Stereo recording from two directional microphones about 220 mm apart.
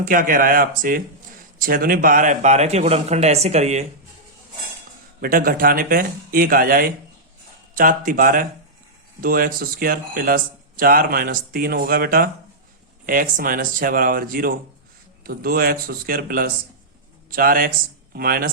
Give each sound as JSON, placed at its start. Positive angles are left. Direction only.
{"t": 0.0, "sound": "a man's voice", "side_deg": -35}
{"t": 5.2, "sound": "a man's voice", "side_deg": -40}